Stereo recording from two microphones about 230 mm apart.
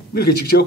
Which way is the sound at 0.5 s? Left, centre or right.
Left.